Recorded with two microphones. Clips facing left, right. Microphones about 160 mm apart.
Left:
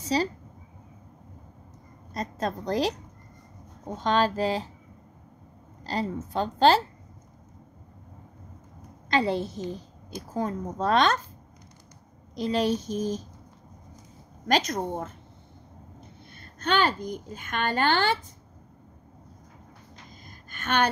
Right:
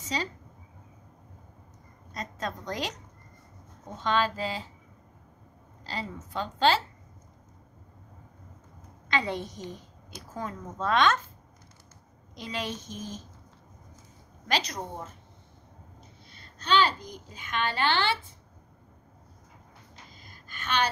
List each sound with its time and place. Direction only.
0.0 s speech: 35° left (ahead or behind)
2.1 s a woman's voice: 35° left (ahead or behind)
4.0 s a child's voice: 40° left (ahead or behind)
5.9 s a child's voice: 40° left (ahead or behind)
9.1 s a woman's voice: 30° left (ahead or behind)
12.4 s a woman's voice: 40° left (ahead or behind)
14.5 s a child's voice: 50° left (ahead or behind)
16.3 s a child's voice: 55° left (ahead or behind)
20.2 s a sound: 50° left (ahead or behind)